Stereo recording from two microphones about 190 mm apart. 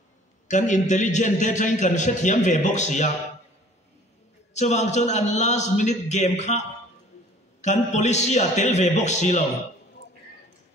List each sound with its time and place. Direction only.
0.5 s a man's voice: 40° left (ahead or behind)
4.6 s a man's voice: 35° left (ahead or behind)
7.6 s a man's voice: 35° left (ahead or behind)